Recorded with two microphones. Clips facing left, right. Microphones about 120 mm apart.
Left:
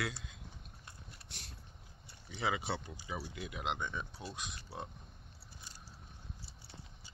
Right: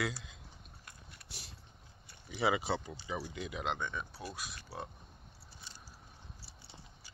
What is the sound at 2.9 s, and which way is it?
Speech, 15° left (ahead or behind).